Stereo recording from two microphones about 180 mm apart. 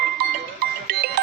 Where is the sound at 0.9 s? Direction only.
60° right (ahead or behind).